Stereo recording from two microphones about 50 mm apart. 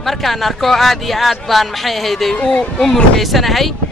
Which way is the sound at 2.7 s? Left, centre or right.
Centre.